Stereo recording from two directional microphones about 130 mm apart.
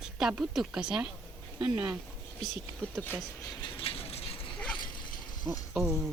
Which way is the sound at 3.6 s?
40° left (ahead or behind).